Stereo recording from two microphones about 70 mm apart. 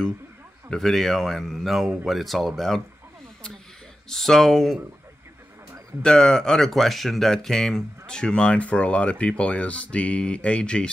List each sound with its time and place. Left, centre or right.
0.7 s speech: centre
4.1 s speech: centre
6.0 s speech: centre